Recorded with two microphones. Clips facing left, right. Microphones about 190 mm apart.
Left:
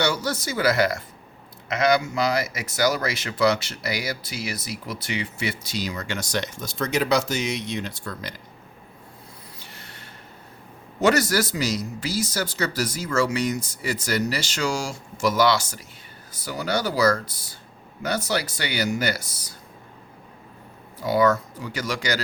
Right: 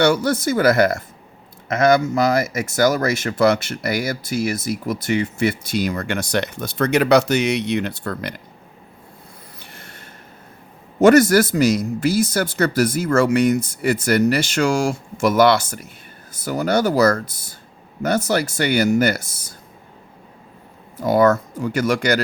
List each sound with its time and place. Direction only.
0.0 s speech: 55° right (ahead or behind)
9.6 s a sound: 50° right (ahead or behind)
11.0 s speech: 50° right (ahead or behind)
21.0 s speech: 50° right (ahead or behind)